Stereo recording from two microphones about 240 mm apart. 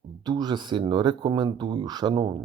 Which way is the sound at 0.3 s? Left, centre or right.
Centre.